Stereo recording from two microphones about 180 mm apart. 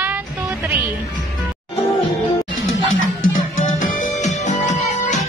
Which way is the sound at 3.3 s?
45° left (ahead or behind).